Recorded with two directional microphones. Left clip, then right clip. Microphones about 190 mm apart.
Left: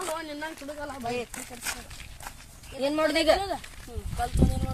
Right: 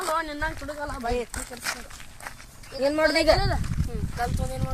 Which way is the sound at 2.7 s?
10° right (ahead or behind).